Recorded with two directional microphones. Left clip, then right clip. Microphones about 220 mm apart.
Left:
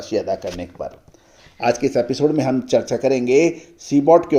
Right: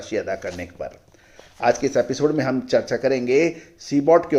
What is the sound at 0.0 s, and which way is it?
Speech, 10° left (ahead or behind).